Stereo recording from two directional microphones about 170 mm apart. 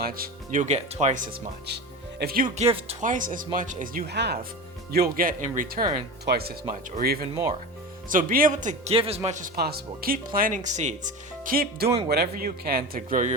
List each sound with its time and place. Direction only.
0.0 s speech: 60° right (ahead or behind)
1.6 s speech: 75° right (ahead or behind)
2.6 s speech: 35° right (ahead or behind)
4.0 s speech: 75° right (ahead or behind)
4.9 s speech: 60° right (ahead or behind)
6.2 s speech: 65° right (ahead or behind); by 9.5 s 45° right (ahead or behind)
9.6 s speech: 65° right (ahead or behind); by 13.3 s 50° right (ahead or behind)